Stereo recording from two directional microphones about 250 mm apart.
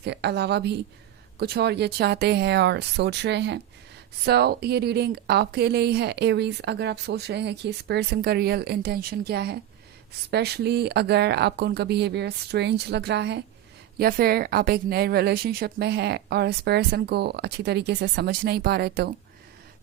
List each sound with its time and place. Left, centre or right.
0.0 s a woman's voice: right